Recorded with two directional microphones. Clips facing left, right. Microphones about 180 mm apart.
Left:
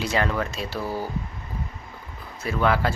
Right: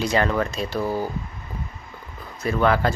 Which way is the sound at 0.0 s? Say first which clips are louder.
Right 3 dB; 5° left (ahead or behind).